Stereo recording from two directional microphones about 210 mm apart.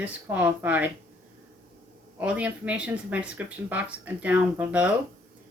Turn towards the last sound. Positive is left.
turn(degrees=-5)  # may be behind; listen again after turning